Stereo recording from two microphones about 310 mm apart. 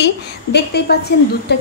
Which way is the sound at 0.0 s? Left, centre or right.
Left.